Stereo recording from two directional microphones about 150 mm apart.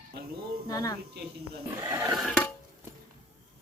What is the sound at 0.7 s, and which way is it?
Speech, 25° left (ahead or behind).